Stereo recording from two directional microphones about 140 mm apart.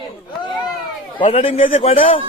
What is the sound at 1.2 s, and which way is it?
Speech, 45° left (ahead or behind).